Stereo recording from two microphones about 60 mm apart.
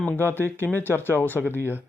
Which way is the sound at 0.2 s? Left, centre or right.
Left.